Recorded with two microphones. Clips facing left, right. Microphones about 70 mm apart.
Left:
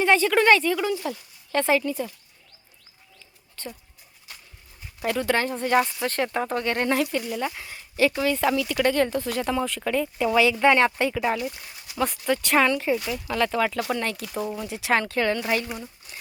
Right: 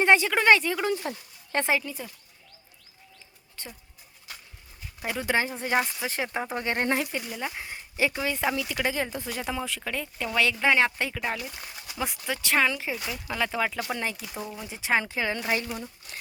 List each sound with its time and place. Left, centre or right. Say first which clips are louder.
0.0 s a woman's voice: left 2 dB; centre
0.9 s speech: left 1 dB; right
1.5 s a woman's voice: left 4 dB; centre
1.8 s speech: left 9 dB; centre
3.6 s a sound: left 6 dB; centre
5.0 s speech: left 4 dB; centre
14.3 s speech: left 7 dB; centre